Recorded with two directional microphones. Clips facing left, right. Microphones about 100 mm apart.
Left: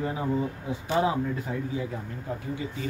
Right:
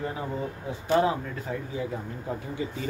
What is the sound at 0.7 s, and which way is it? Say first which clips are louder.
Speech: right 3 dB; 10° left (ahead or behind).